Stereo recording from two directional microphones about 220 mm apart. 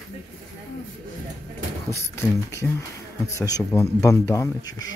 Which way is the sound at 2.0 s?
15° left (ahead or behind).